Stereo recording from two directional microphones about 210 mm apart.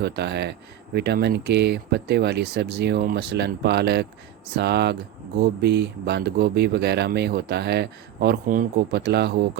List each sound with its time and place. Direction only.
0.0 s speech: 55° right (ahead or behind)